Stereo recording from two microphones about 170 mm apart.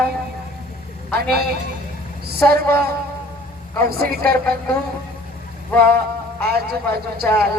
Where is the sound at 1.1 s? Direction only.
70° right (ahead or behind).